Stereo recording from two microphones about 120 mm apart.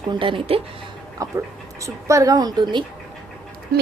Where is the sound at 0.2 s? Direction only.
45° right (ahead or behind).